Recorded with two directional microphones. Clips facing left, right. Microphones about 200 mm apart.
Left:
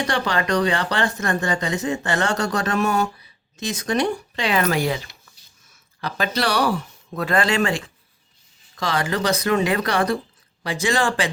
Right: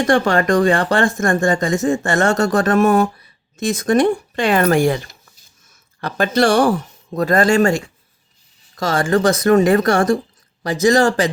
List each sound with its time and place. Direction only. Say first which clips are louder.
0.0 s speech: right 8 dB; 50° right (ahead or behind)